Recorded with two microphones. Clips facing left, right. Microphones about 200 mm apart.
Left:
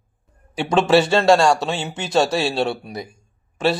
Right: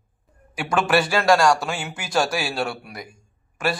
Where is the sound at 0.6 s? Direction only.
25° left (ahead or behind).